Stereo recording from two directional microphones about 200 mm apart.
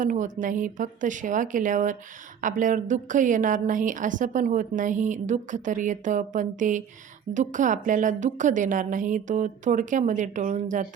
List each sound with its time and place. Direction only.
0.0 s a woman's voice: 40° right (ahead or behind)